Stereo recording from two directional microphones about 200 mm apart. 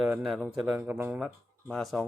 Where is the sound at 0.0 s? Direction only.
5° right (ahead or behind).